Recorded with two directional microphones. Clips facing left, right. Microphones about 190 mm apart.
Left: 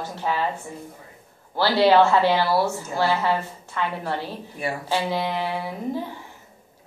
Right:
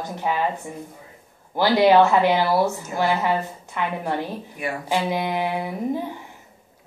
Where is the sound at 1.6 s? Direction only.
15° right (ahead or behind).